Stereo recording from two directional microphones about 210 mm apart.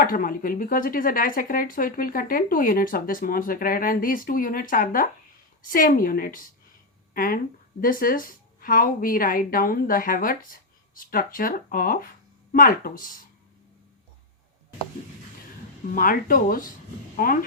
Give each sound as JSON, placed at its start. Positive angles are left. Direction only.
{"t": 0.0, "sound": "a woman's voice", "side_deg": 40}
{"t": 16.0, "sound": "a woman's voice", "side_deg": 40}